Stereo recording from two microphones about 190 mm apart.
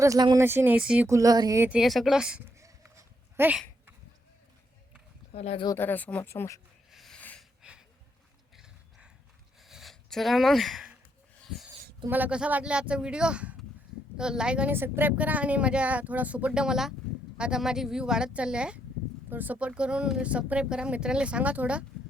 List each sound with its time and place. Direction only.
0.0 s a woman's voice: 20° right (ahead or behind)
2.6 s goat: 15° right (ahead or behind)
5.3 s speech: 35° left (ahead or behind)
5.6 s speech: 10° left (ahead or behind)
6.9 s a sound: centre (ahead or behind)
8.5 s horse: 5° right (ahead or behind)
9.6 s a sound: centre (ahead or behind)
12.0 s a woman's voice: 10° right (ahead or behind)